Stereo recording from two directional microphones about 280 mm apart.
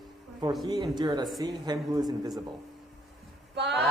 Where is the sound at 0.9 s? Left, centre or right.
Centre.